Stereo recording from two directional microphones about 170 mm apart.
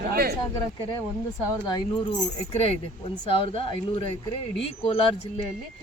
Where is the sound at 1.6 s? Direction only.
25° left (ahead or behind).